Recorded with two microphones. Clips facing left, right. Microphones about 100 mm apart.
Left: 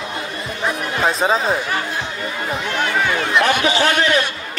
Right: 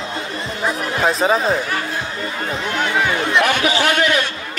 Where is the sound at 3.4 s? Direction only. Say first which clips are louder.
Left 1 dB; 35° left (ahead or behind).